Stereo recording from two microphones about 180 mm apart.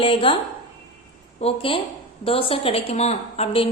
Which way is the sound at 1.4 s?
30° left (ahead or behind).